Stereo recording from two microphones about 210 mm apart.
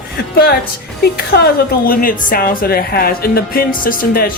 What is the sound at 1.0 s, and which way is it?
Speech, 50° left (ahead or behind).